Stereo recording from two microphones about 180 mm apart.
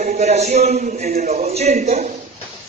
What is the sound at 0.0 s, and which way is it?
Speech, 40° right (ahead or behind).